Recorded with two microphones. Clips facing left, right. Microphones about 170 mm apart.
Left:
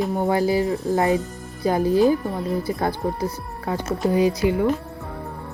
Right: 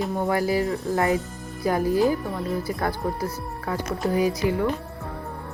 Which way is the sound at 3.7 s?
25° left (ahead or behind).